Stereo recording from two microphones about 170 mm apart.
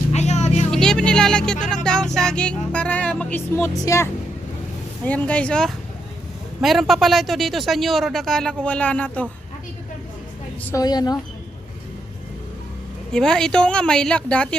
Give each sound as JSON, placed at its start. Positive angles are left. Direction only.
{"t": 0.1, "sound": "vehicle", "side_deg": 40}
{"t": 0.7, "sound": "music", "side_deg": 5}
{"t": 1.7, "sound": "speech", "side_deg": 5}
{"t": 10.6, "sound": "speech", "side_deg": 15}
{"t": 10.8, "sound": "a woman's voice", "side_deg": 25}
{"t": 13.1, "sound": "speech", "side_deg": 5}